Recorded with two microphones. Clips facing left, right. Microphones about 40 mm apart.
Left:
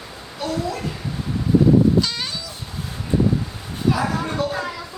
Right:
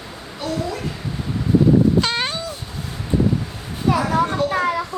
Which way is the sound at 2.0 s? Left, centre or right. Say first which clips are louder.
Right 4 dB; right.